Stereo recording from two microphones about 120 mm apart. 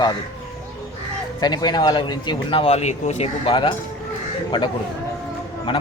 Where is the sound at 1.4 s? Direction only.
35° left (ahead or behind).